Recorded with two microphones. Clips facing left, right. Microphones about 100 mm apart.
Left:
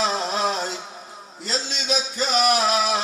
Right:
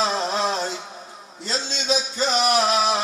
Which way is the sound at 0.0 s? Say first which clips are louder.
Right 1 dB; 30° right (ahead or behind).